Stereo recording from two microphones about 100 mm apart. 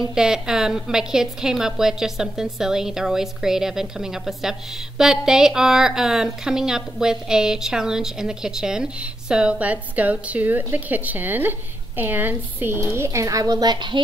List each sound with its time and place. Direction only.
0.0 s a woman's voice: 5° right (ahead or behind); by 14.0 s 50° right (ahead or behind)